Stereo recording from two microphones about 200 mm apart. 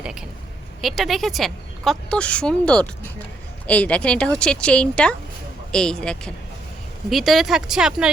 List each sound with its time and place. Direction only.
0.0 s a woman's voice: 5° right (ahead or behind)